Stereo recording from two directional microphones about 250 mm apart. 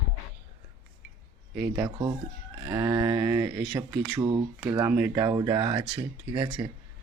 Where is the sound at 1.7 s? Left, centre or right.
Centre.